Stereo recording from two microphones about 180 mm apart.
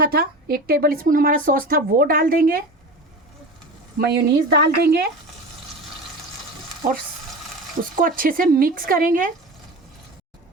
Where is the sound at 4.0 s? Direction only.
60° right (ahead or behind).